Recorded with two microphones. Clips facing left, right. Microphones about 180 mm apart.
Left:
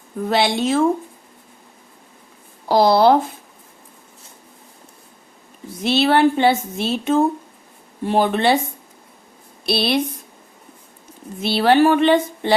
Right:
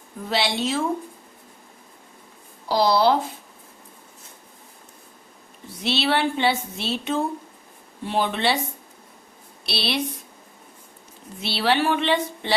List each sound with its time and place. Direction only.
0.3 s speech: 50° left (ahead or behind)
2.6 s speech: 50° left (ahead or behind)
5.8 s speech: 45° left (ahead or behind)
9.6 s speech: 50° left (ahead or behind)
11.3 s speech: 50° left (ahead or behind)